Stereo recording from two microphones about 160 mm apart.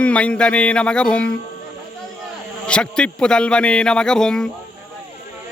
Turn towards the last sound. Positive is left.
turn(degrees=5)  # may be behind; listen again after turning